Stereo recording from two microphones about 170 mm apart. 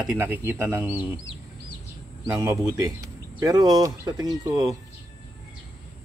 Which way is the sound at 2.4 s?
20° right (ahead or behind).